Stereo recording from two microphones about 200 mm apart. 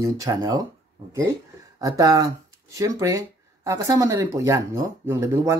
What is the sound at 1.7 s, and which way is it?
Speech, 15° right (ahead or behind).